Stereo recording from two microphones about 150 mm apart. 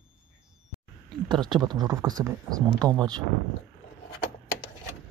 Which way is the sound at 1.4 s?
30° right (ahead or behind).